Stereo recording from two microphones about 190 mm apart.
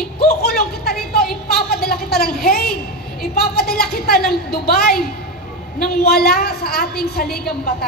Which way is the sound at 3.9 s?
55° left (ahead or behind).